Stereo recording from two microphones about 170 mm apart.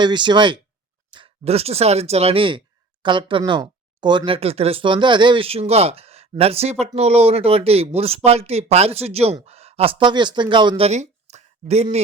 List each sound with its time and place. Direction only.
0.0 s speech: 25° right (ahead or behind)